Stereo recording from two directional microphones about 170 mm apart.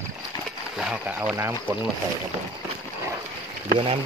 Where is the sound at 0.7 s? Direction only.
5° right (ahead or behind).